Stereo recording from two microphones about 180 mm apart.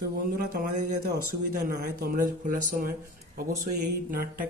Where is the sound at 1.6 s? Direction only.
50° right (ahead or behind).